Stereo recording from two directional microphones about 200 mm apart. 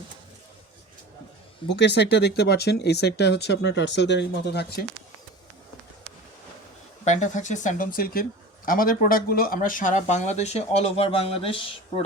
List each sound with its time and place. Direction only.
1.7 s speech: 60° left (ahead or behind)
7.0 s speech: 35° left (ahead or behind)